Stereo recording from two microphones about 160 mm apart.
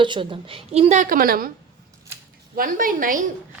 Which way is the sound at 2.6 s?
60° right (ahead or behind).